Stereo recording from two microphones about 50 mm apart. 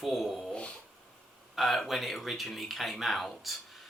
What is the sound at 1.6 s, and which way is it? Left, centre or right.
Speech, centre.